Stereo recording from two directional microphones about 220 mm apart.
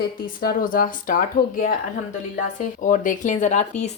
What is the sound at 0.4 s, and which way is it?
Speech, 40° left (ahead or behind).